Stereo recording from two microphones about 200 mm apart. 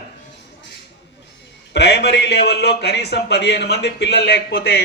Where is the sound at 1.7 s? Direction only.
60° left (ahead or behind).